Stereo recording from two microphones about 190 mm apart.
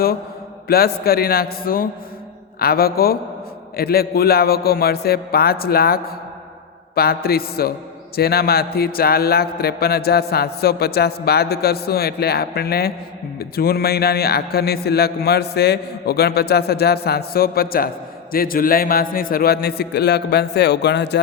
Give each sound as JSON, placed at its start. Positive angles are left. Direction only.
{"t": 0.7, "sound": "a man's voice", "side_deg": 55}